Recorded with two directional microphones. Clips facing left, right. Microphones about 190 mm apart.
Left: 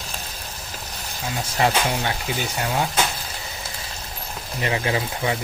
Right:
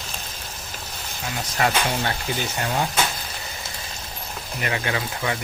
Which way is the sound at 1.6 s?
25° left (ahead or behind).